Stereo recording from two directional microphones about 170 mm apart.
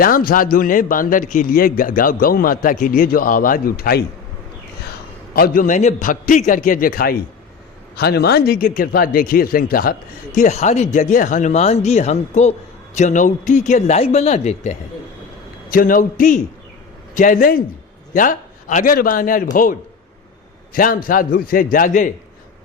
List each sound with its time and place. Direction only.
0.0 s a man's voice: 60° left (ahead or behind)
5.3 s a man's voice: 60° left (ahead or behind)
7.9 s a man's voice: 70° left (ahead or behind); by 14.8 s 40° left (ahead or behind)
15.7 s a man's voice: 55° left (ahead or behind)
20.7 s a man's voice: 55° left (ahead or behind)